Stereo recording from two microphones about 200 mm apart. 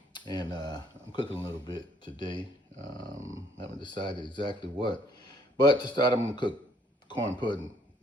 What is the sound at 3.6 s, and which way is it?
Speech, 25° left (ahead or behind).